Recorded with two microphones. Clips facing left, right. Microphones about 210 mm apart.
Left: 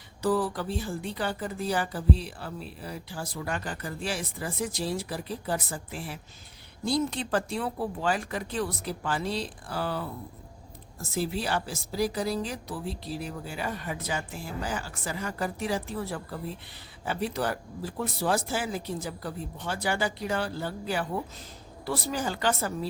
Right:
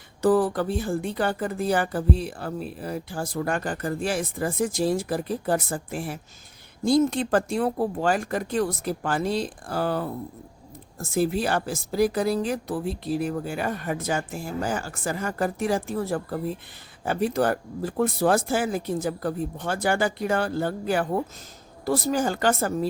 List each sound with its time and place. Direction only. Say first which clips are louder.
0.2 s speech: right 6 dB; 50° right (ahead or behind)